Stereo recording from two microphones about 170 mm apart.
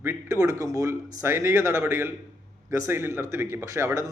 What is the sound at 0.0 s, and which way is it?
A man's voice, 15° right (ahead or behind).